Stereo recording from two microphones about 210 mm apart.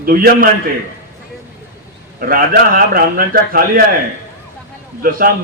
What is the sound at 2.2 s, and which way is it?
A man's voice, 45° right (ahead or behind).